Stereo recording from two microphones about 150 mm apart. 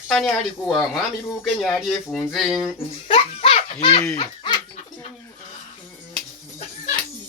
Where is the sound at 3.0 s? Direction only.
40° left (ahead or behind).